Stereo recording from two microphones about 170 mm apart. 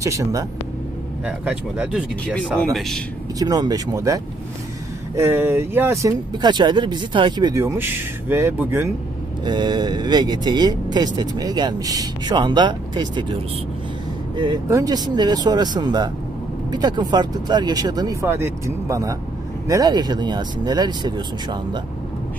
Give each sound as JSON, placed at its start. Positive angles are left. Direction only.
{"t": 0.0, "sound": "speech", "side_deg": -20}
{"t": 1.2, "sound": "speech", "side_deg": -5}
{"t": 3.3, "sound": "speech", "side_deg": -20}
{"t": 6.4, "sound": "speech", "side_deg": -25}
{"t": 7.6, "sound": "speech", "side_deg": -10}
{"t": 9.4, "sound": "speech", "side_deg": -25}